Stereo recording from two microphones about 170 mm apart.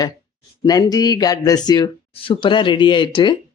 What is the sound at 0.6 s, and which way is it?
Speech, 20° left (ahead or behind).